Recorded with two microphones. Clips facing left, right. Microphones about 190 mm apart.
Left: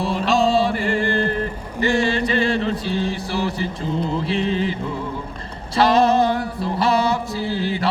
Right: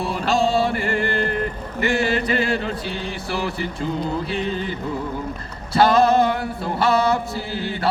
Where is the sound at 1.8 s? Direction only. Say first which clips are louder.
Left 2 dB; 30° left (ahead or behind).